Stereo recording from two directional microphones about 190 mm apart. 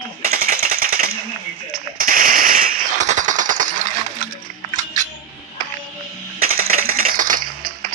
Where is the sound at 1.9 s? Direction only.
50° right (ahead or behind).